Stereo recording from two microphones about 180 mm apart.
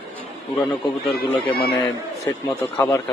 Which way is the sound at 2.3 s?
15° left (ahead or behind).